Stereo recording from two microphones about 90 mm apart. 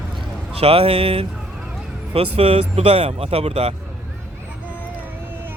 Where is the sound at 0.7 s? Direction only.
90° right.